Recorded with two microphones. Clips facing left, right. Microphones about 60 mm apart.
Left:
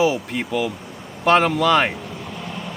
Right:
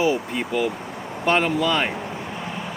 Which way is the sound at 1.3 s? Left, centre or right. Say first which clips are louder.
Left 4 dB; left.